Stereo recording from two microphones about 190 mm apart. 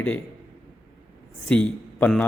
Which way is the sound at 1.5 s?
5° left (ahead or behind).